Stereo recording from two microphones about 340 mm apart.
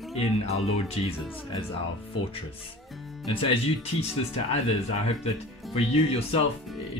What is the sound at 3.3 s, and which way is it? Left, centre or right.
Speech, centre.